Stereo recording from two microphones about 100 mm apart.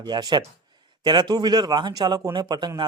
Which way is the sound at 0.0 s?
45° right (ahead or behind).